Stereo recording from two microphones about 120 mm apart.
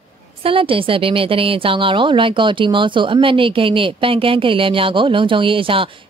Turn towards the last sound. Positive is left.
turn(degrees=-45)  # may be behind; listen again after turning